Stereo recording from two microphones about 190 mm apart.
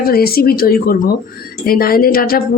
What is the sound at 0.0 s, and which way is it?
Speech, 55° left (ahead or behind).